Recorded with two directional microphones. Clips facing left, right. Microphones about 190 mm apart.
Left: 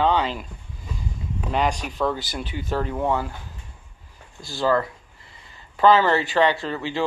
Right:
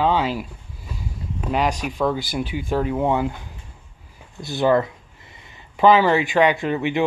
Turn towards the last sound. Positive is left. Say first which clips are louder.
# right 5 dB
turn(degrees=-20)  # may be behind; listen again after turning